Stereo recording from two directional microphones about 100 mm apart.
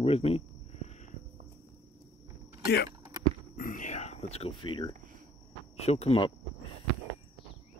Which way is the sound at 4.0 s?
90° left.